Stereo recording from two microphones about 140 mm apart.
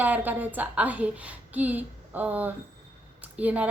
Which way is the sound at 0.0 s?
10° right (ahead or behind).